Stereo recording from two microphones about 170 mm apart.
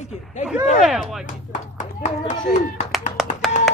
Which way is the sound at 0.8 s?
Centre (ahead or behind).